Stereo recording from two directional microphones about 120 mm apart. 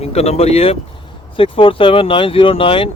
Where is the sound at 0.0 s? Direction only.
60° left (ahead or behind).